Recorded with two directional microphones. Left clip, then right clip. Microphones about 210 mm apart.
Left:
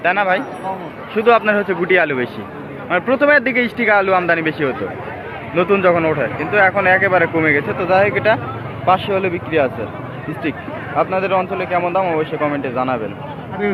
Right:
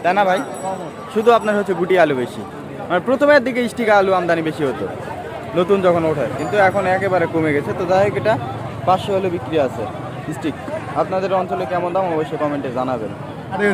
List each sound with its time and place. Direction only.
0.0 s speech: 15° right (ahead or behind)
10.9 s speech: 10° right (ahead or behind)